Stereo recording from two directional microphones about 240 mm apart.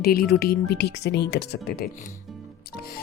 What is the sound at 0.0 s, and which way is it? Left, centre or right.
Speech, left.